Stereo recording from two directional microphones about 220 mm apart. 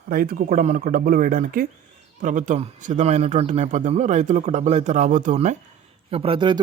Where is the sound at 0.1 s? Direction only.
45° right (ahead or behind).